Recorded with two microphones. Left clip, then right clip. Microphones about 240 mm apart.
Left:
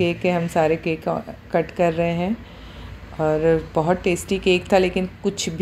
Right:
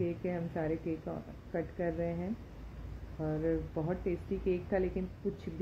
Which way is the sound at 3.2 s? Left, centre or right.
Centre.